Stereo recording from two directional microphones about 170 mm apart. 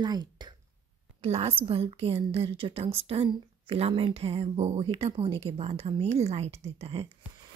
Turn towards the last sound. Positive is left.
turn(degrees=-35)  # may be behind; listen again after turning